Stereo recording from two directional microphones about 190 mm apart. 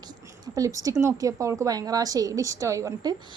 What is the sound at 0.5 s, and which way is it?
A woman's voice, 15° right (ahead or behind).